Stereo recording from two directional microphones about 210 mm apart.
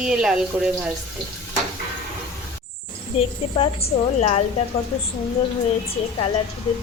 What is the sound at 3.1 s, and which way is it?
A woman's voice, 30° left (ahead or behind).